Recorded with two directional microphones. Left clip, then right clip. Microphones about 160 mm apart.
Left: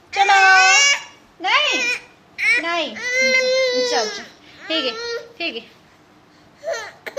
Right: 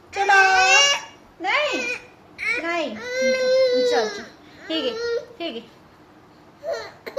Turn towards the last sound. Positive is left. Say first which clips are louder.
# left 2 dB
turn(degrees=-10)  # may be behind; listen again after turning